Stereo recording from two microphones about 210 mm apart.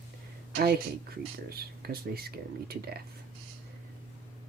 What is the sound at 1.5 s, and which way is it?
Speech, 45° right (ahead or behind).